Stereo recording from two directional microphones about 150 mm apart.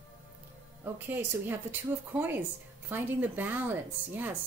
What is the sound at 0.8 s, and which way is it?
Speech, 15° right (ahead or behind).